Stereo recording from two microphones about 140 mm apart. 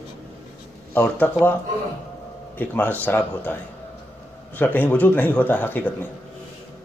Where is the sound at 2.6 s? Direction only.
10° left (ahead or behind).